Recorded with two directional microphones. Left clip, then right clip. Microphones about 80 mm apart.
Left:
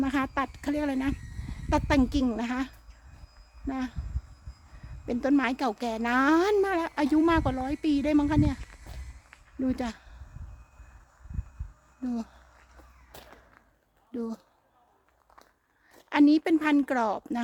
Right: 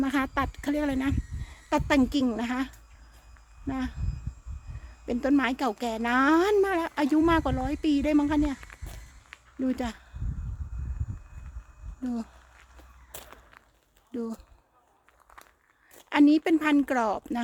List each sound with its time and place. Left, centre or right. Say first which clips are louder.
0.0 s speech: right 1 dB; right
5.0 s speech: right 1 dB; centre
9.6 s speech: even; centre
12.0 s speech: even; centre
14.1 s speech: right 1 dB; centre
15.9 s speech: right 1 dB; centre